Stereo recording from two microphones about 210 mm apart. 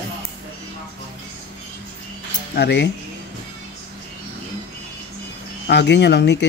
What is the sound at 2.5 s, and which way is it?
Speech, 55° left (ahead or behind).